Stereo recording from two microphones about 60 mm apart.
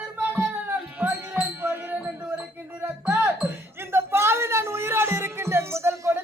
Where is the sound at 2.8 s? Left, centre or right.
Right.